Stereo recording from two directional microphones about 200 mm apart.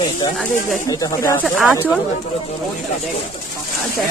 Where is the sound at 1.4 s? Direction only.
Centre (ahead or behind).